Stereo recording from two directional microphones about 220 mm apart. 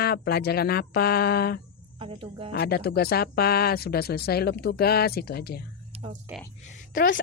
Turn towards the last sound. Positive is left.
turn(degrees=40)  # may be behind; listen again after turning